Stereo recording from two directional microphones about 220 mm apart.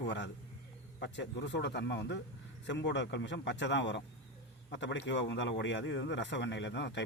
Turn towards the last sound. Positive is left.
turn(degrees=55)  # may be behind; listen again after turning